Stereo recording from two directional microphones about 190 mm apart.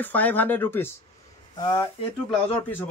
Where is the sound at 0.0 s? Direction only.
10° left (ahead or behind).